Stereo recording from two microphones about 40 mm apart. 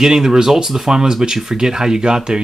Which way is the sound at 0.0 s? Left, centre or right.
Centre.